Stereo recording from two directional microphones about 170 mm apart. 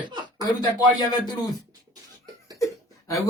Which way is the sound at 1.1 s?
25° left (ahead or behind).